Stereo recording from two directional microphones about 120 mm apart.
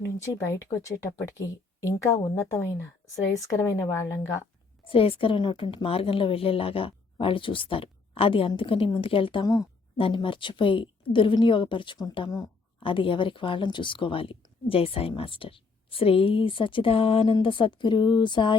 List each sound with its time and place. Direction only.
0.0 s speech: 25° left (ahead or behind)
4.9 s a woman's voice: 50° left (ahead or behind)